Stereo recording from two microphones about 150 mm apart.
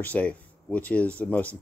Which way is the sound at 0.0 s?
10° left (ahead or behind).